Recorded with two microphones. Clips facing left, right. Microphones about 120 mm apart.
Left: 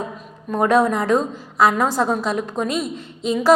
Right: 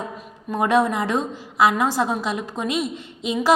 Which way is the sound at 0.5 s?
45° left (ahead or behind).